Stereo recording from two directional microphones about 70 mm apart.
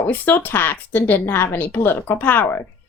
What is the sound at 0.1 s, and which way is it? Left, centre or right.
A woman's voice, left.